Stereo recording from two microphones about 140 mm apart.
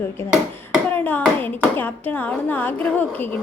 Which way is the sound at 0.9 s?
10° left (ahead or behind).